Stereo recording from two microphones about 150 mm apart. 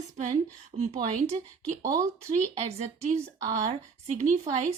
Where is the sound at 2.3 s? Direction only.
45° right (ahead or behind).